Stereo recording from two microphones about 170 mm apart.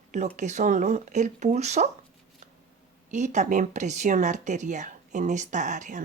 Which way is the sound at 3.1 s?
45° right (ahead or behind).